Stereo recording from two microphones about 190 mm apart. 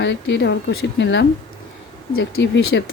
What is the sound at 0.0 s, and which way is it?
Speech, 70° left (ahead or behind).